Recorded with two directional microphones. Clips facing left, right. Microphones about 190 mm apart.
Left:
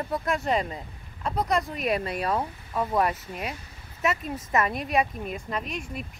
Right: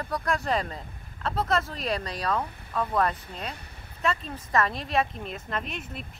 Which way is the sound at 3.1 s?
10° left (ahead or behind).